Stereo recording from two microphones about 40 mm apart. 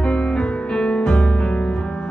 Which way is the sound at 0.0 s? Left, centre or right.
Left.